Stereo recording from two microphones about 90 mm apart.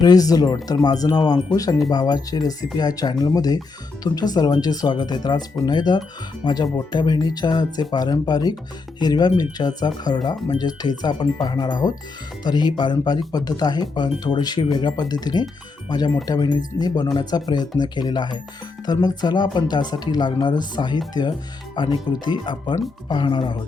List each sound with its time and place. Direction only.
0.0 s speech: 45° left (ahead or behind)
21.8 s speech: 60° left (ahead or behind)